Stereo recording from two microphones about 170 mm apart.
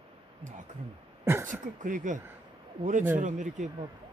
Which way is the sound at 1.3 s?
15° right (ahead or behind).